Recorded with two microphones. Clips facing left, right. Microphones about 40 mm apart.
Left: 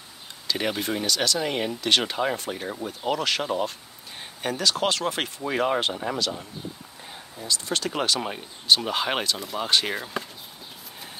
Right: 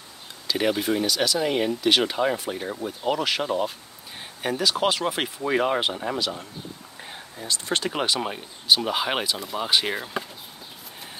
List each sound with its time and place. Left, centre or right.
0.5 s speech: centre
7.4 s speech: right
7.8 s speech: centre